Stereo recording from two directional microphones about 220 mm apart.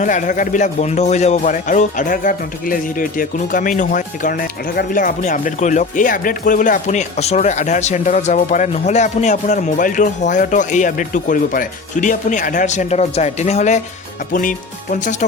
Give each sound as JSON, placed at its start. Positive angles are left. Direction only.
{"t": 0.0, "sound": "speech", "side_deg": 35}